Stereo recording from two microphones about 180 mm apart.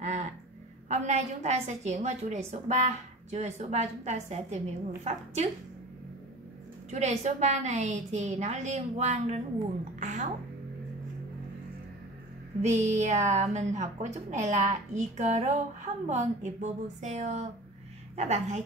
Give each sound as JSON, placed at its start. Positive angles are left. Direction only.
{"t": 0.0, "sound": "music", "side_deg": -40}
{"t": 0.8, "sound": "a woman's voice", "side_deg": -40}
{"t": 6.9, "sound": "a woman's voice", "side_deg": -40}
{"t": 9.9, "sound": "music", "side_deg": -45}
{"t": 12.6, "sound": "a woman's voice", "side_deg": -40}